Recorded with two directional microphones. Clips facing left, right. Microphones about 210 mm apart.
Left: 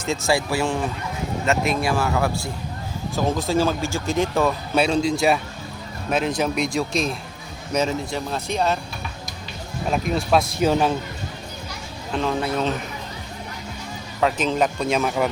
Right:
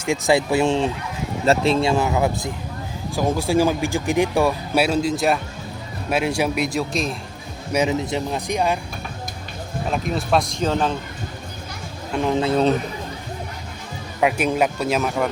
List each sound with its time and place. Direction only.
0.0 s a man's voice: 15° right (ahead or behind)
7.7 s speech: 15° right (ahead or behind)
9.9 s a man's voice: centre (ahead or behind)
12.1 s speech: 15° right (ahead or behind)
14.2 s speech: 10° right (ahead or behind)